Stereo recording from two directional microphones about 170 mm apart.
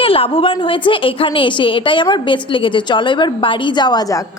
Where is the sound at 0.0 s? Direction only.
35° left (ahead or behind).